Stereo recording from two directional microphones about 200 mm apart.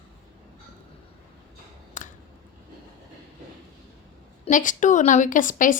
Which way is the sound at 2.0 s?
40° left (ahead or behind).